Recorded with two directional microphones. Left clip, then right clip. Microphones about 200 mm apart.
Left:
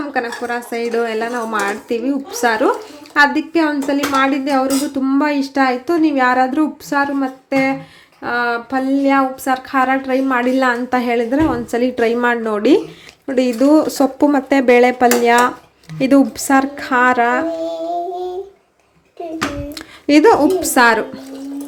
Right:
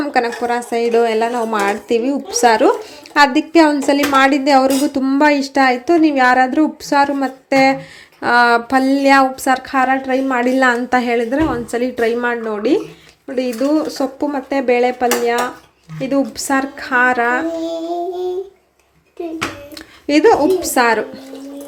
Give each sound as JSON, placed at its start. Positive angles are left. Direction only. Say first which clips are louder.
{"t": 0.0, "sound": "a woman's voice", "louder": "right 4 dB", "side_deg": -20}
{"t": 8.2, "sound": "a woman's voice", "louder": "right 6 dB", "side_deg": -30}
{"t": 16.4, "sound": "speech", "louder": "left 3 dB", "side_deg": 10}
{"t": 19.7, "sound": "speech", "louder": "left 3 dB", "side_deg": 10}